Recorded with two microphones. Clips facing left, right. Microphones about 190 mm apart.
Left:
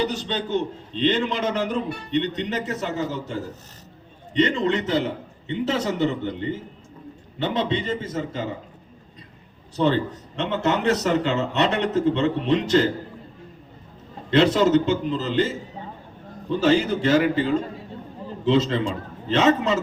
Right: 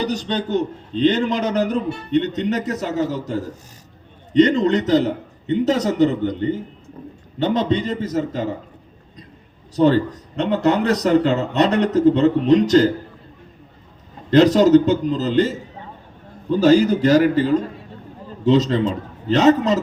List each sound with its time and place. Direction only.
0.0 s a man's voice: 40° right (ahead or behind)
10.3 s a man's voice: 40° right (ahead or behind)
14.3 s a man's voice: 40° right (ahead or behind)